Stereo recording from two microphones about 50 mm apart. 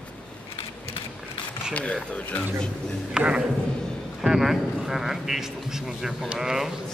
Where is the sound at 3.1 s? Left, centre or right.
Centre.